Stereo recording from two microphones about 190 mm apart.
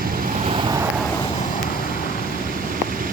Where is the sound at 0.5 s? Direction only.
20° right (ahead or behind).